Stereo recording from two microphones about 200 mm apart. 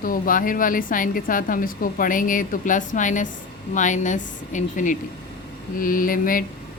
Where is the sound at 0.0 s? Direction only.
45° left (ahead or behind).